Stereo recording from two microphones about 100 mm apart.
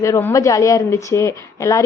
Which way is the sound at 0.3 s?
35° left (ahead or behind).